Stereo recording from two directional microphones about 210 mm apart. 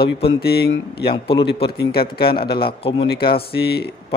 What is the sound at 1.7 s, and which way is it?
Speech, 50° left (ahead or behind).